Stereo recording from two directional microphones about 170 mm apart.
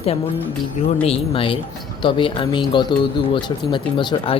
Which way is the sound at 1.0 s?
35° left (ahead or behind).